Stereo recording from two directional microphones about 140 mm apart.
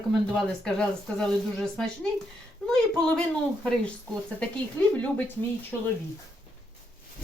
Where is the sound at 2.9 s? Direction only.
5° left (ahead or behind).